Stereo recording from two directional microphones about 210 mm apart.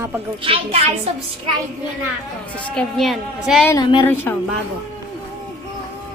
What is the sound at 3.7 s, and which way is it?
Speech, 20° left (ahead or behind).